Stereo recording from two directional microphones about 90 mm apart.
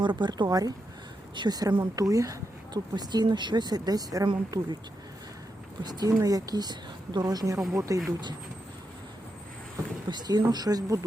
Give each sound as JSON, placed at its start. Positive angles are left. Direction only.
{"t": 0.0, "sound": "speech", "side_deg": -60}
{"t": 4.3, "sound": "speech", "side_deg": -55}
{"t": 5.8, "sound": "speech", "side_deg": -50}
{"t": 10.1, "sound": "speech", "side_deg": -50}